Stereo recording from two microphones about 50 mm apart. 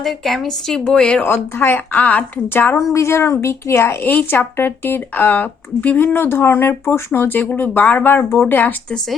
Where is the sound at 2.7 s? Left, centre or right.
Left.